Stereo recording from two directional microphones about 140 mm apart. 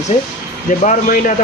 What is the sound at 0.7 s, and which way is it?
Speech, 65° left (ahead or behind).